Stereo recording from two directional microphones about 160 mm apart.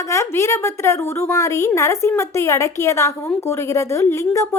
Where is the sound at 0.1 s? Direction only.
15° left (ahead or behind).